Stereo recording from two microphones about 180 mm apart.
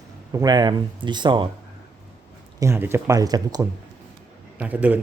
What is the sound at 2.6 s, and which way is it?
Speech, 15° right (ahead or behind).